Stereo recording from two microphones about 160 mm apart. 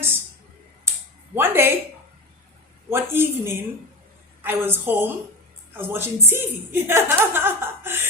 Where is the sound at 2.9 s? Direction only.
15° right (ahead or behind).